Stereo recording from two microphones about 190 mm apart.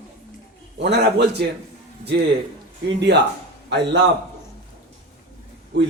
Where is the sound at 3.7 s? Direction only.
65° right (ahead or behind).